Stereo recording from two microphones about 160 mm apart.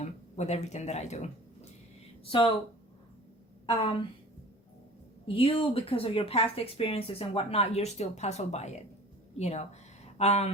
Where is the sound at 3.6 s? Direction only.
30° left (ahead or behind).